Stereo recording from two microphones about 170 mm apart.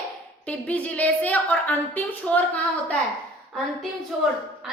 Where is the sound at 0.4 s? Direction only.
10° left (ahead or behind).